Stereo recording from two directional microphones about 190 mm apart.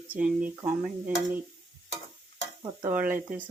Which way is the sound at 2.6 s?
20° right (ahead or behind).